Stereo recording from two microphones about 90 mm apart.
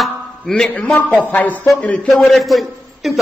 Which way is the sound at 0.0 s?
5° left (ahead or behind).